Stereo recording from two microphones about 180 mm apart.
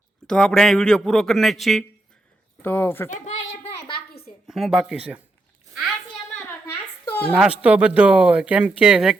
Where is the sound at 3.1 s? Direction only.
40° left (ahead or behind).